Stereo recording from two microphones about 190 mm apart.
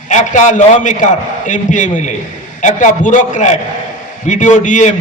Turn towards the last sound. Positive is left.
turn(degrees=40)  # may be behind; listen again after turning